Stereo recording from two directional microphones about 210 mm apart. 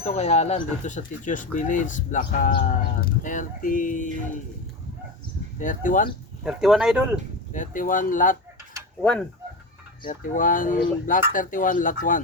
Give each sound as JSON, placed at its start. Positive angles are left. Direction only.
{"t": 0.0, "sound": "speech", "side_deg": 30}
{"t": 5.5, "sound": "speech", "side_deg": 40}
{"t": 6.4, "sound": "speech", "side_deg": -5}
{"t": 7.5, "sound": "speech", "side_deg": 40}
{"t": 10.1, "sound": "speech", "side_deg": 40}